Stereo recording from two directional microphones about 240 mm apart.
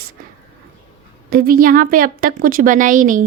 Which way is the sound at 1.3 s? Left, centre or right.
Right.